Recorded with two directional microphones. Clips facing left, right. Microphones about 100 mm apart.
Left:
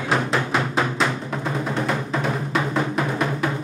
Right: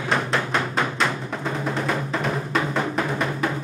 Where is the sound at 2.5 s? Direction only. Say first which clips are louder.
Left 1 dB; centre (ahead or behind).